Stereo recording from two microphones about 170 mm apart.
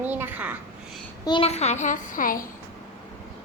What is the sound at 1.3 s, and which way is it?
A child's voice, 35° left (ahead or behind).